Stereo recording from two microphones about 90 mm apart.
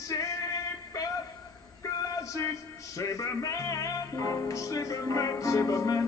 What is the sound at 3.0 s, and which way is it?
Music, 35° left (ahead or behind).